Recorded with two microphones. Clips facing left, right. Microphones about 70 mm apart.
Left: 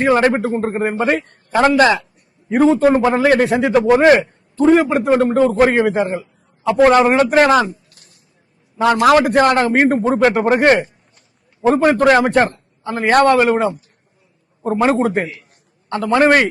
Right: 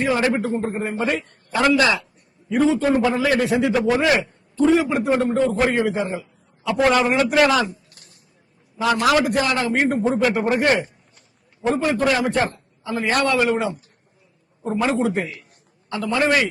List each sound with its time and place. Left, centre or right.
0.0 s a man's voice: left
8.8 s a man's voice: left